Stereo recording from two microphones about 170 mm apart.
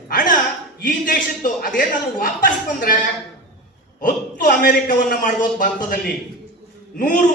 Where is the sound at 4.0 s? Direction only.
50° left (ahead or behind).